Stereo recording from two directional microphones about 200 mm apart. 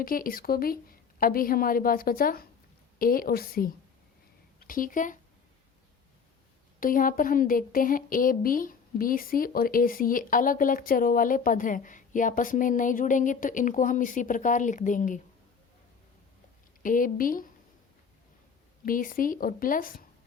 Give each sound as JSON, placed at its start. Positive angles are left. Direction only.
{"t": 0.0, "sound": "speech", "side_deg": 45}
{"t": 6.7, "sound": "speech", "side_deg": 45}
{"t": 16.8, "sound": "speech", "side_deg": 45}
{"t": 18.9, "sound": "speech", "side_deg": 45}